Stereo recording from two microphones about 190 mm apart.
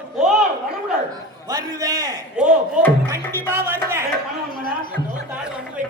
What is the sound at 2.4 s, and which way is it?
Speech, 5° right (ahead or behind).